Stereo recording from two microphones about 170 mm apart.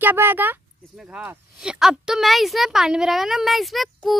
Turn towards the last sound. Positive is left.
turn(degrees=0)  # may be behind; listen again after turning